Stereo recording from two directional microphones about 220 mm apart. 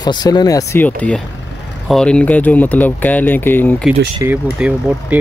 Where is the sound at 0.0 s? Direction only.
20° left (ahead or behind).